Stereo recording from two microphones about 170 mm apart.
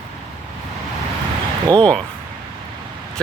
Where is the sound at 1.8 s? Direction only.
5° left (ahead or behind).